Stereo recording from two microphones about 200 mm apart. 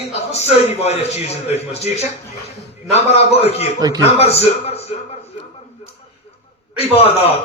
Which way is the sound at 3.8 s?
20° right (ahead or behind).